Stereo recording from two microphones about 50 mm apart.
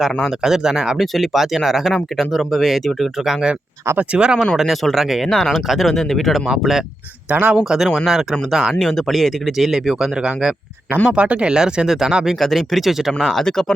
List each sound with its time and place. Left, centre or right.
0.3 s speech: centre
3.9 s speech: right
4.5 s speech: centre
6.5 s speech: centre
7.3 s speech: right
7.6 s speech: centre
8.8 s speech: centre
12.4 s speech: centre
13.2 s speech: centre